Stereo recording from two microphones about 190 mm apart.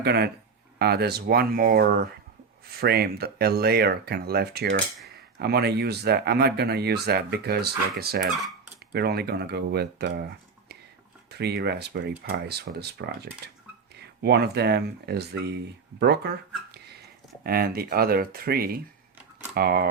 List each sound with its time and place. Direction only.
0.0 s speech: 60° right (ahead or behind)
16.7 s a sound: 60° right (ahead or behind)
17.4 s speech: 50° right (ahead or behind)